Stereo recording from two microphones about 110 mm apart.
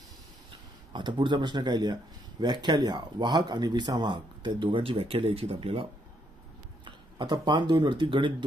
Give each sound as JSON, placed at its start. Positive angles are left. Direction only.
{"t": 0.5, "sound": "speech", "side_deg": -45}
{"t": 6.8, "sound": "speech", "side_deg": -45}